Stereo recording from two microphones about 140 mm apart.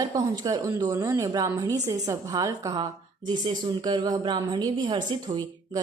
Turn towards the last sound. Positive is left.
turn(degrees=-35)  # may be behind; listen again after turning